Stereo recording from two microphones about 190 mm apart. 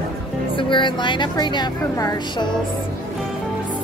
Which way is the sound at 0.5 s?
25° left (ahead or behind).